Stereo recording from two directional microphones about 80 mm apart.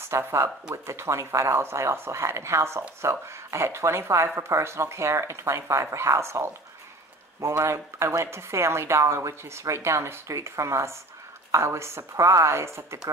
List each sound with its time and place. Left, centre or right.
0.1 s speech: right